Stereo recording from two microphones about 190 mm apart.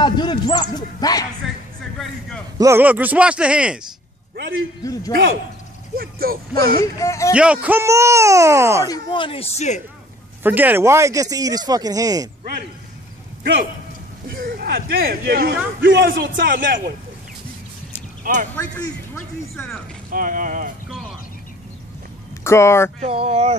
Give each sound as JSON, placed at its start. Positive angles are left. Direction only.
{"t": 0.0, "sound": "speech", "side_deg": 25}
{"t": 2.0, "sound": "a man's voice", "side_deg": 5}
{"t": 2.6, "sound": "speech", "side_deg": -10}
{"t": 5.9, "sound": "speech", "side_deg": -50}
{"t": 6.8, "sound": "speech", "side_deg": 15}
{"t": 7.6, "sound": "speech", "side_deg": -15}
{"t": 8.8, "sound": "speech", "side_deg": 20}
{"t": 10.4, "sound": "speech", "side_deg": -10}
{"t": 13.4, "sound": "a man's voice", "side_deg": -60}
{"t": 18.2, "sound": "speech", "side_deg": -45}
{"t": 18.5, "sound": "speech", "side_deg": 10}
{"t": 20.1, "sound": "speech", "side_deg": -45}
{"t": 22.4, "sound": "speech", "side_deg": 15}
{"t": 22.9, "sound": "speech", "side_deg": -30}